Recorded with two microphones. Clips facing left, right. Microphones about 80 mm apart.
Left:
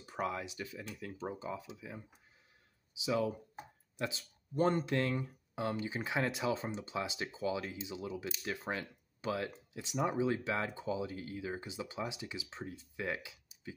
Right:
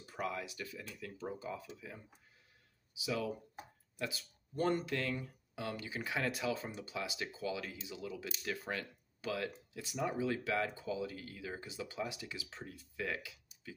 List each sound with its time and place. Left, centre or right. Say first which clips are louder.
0.0 s speech: left 3 dB; left
2.9 s speech: left 4 dB; left